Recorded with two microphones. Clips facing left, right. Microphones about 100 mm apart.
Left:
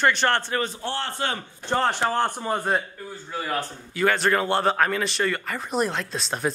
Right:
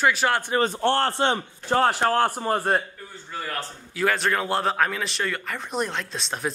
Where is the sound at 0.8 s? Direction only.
65° right (ahead or behind).